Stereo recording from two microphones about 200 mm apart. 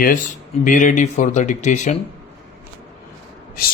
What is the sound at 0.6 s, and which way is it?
Speech, 40° left (ahead or behind).